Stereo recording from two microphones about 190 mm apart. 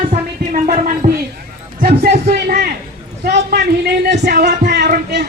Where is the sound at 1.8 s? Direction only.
50° right (ahead or behind).